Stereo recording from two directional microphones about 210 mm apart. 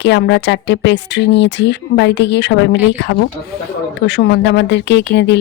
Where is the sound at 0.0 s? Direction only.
55° left (ahead or behind).